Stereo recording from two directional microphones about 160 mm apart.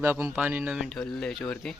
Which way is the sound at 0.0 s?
15° right (ahead or behind).